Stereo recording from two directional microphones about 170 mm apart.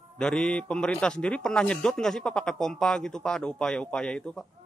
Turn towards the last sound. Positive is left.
turn(degrees=5)  # may be behind; listen again after turning